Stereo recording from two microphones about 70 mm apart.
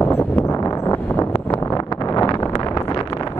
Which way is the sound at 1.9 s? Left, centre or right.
Left.